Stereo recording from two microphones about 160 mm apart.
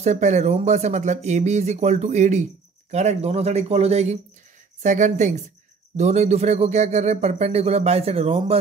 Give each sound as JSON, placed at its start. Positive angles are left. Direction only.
{"t": 0.0, "sound": "speech", "side_deg": -45}